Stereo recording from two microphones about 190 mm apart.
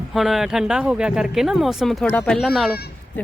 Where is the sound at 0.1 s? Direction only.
Centre (ahead or behind).